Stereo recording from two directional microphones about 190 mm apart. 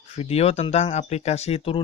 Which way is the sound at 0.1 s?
30° left (ahead or behind).